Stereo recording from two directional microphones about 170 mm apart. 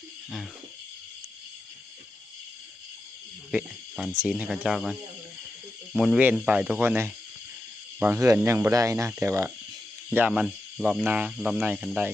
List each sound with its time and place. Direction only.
3.5 s cricket: 5° right (ahead or behind)
4.2 s speech: 5° right (ahead or behind)